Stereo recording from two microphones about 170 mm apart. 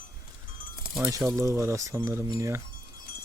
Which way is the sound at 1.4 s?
15° right (ahead or behind).